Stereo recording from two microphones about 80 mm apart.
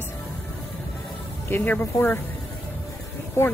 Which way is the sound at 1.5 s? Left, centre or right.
Left.